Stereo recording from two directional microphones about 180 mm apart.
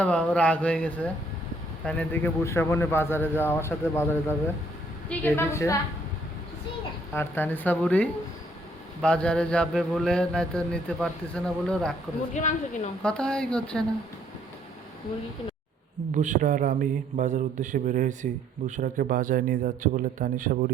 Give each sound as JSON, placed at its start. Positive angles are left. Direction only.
{"t": 0.0, "sound": "speech", "side_deg": 5}
{"t": 7.1, "sound": "speech", "side_deg": 10}
{"t": 9.0, "sound": "mantra", "side_deg": 5}
{"t": 12.3, "sound": "a woman's voice", "side_deg": 45}
{"t": 13.0, "sound": "mantra", "side_deg": 5}
{"t": 16.1, "sound": "speech", "side_deg": -45}